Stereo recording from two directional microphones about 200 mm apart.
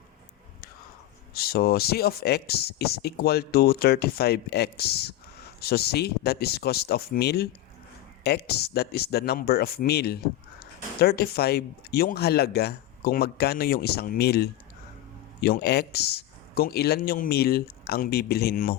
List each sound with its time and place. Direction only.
1.3 s speech: 50° left (ahead or behind)